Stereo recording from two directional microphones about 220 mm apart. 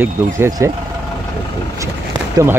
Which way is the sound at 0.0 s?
15° right (ahead or behind).